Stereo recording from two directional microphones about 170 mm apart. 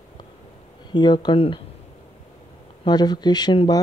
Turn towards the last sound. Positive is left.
turn(degrees=25)  # may be behind; listen again after turning